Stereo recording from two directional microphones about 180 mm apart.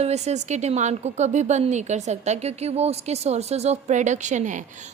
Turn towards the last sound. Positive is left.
turn(degrees=-45)  # may be behind; listen again after turning